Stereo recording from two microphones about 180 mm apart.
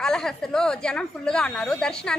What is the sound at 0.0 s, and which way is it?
A woman's voice, 5° left (ahead or behind).